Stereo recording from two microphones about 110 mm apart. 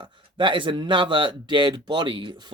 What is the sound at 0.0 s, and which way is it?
Speech, 45° right (ahead or behind).